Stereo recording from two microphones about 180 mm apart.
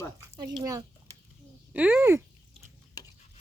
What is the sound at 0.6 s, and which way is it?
Speech, 20° right (ahead or behind).